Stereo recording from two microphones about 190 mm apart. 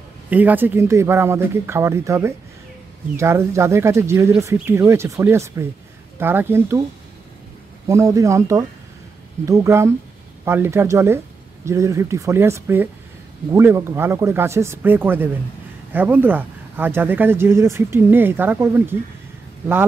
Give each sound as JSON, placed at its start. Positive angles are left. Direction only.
{"t": 0.3, "sound": "speech", "side_deg": -10}
{"t": 7.9, "sound": "speech", "side_deg": -15}